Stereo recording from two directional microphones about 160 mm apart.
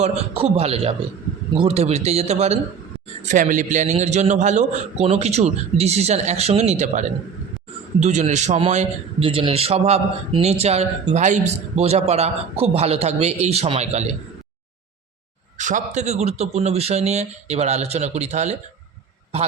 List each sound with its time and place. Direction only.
0.0 s a man's voice: 40° right (ahead or behind)
3.2 s a man's voice: 55° right (ahead or behind)
15.5 s a man's voice: 50° right (ahead or behind)